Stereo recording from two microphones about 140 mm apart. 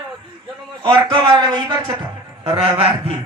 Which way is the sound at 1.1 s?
30° right (ahead or behind).